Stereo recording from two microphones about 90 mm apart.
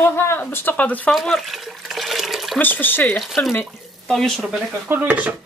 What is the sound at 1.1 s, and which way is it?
Water, centre (ahead or behind).